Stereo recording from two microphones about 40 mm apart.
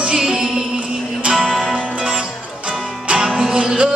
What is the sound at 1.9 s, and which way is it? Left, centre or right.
Music, right.